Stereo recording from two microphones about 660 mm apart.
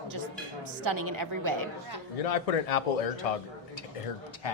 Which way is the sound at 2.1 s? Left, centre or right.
Left.